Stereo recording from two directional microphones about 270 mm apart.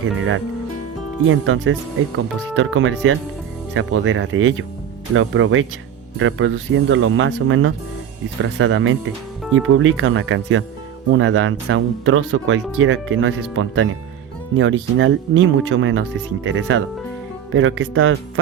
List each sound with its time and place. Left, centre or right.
0.0 s speech: right